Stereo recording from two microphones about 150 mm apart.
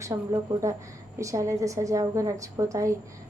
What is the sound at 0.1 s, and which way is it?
A woman's voice, 20° right (ahead or behind).